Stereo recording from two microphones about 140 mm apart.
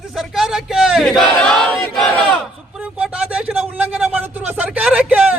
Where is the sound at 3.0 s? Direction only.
10° right (ahead or behind).